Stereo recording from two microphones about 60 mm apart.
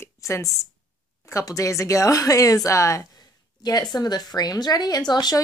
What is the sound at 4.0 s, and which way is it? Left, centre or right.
Speech, left.